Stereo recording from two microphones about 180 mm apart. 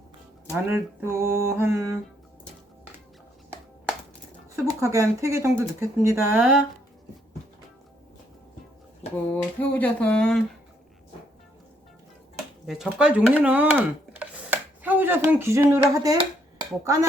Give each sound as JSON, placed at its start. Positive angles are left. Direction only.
{"t": 0.5, "sound": "speech", "side_deg": -15}
{"t": 4.5, "sound": "speech", "side_deg": -15}
{"t": 9.3, "sound": "a sound", "side_deg": 10}
{"t": 12.6, "sound": "speech", "side_deg": 0}